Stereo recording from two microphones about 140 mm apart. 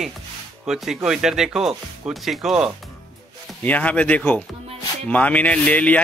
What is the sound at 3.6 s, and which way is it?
Speech, 10° left (ahead or behind).